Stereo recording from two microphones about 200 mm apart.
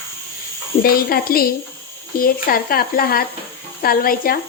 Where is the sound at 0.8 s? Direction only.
50° left (ahead or behind).